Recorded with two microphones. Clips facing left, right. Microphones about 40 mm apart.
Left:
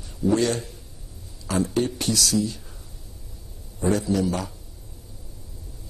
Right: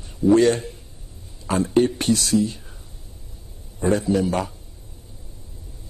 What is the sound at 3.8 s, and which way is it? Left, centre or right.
Speech, right.